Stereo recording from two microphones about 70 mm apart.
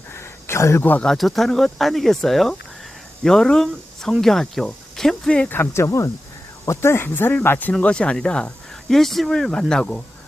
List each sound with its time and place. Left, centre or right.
0.1 s a sound: left
1.0 s speech: centre
5.7 s speech: left
7.1 s speech: left
7.8 s speech: centre